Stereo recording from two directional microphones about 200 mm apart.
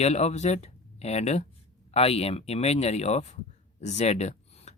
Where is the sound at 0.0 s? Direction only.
35° left (ahead or behind).